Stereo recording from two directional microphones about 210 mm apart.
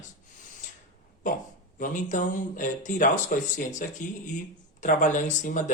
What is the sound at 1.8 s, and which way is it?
Speech, 35° left (ahead or behind).